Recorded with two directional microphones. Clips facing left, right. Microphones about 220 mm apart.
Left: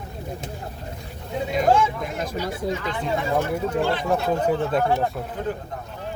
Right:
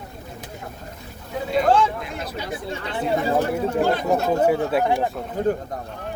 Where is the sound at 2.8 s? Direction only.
35° right (ahead or behind).